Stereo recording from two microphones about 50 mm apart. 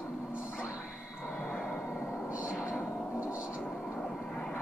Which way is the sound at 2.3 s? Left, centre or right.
Right.